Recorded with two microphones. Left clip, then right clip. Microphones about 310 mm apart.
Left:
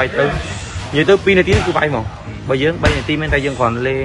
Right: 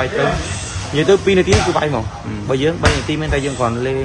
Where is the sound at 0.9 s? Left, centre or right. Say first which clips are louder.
Left 1 dB; centre.